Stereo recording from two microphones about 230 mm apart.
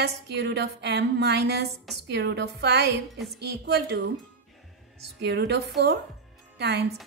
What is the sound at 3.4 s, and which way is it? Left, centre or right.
A woman's voice, right.